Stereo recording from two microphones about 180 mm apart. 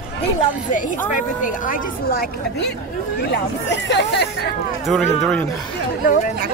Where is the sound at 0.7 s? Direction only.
45° left (ahead or behind).